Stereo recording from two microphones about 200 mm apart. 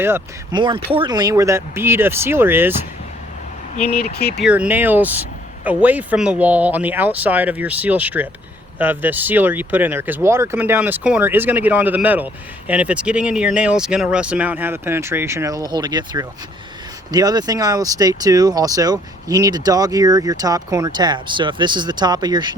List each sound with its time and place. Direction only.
0.5 s speech: 25° right (ahead or behind)
3.8 s speech: 35° left (ahead or behind)
4.2 s speech: 55° left (ahead or behind)
4.4 s speech: 5° right (ahead or behind)